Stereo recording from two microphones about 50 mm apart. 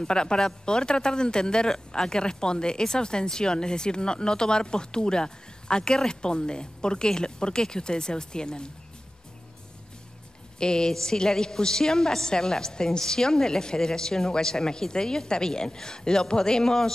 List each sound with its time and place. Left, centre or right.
0.0 s speech: centre
10.6 s speech: centre